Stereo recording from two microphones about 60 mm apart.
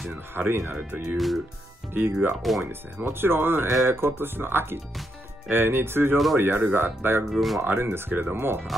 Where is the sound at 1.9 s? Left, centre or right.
Right.